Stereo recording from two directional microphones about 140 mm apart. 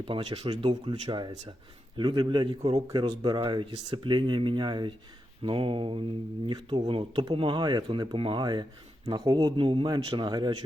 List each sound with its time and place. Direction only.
0.1 s speech: 40° right (ahead or behind)